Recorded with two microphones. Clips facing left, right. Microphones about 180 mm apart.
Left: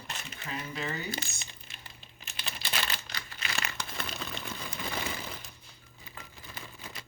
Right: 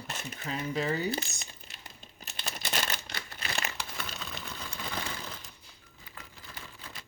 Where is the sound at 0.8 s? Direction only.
35° right (ahead or behind).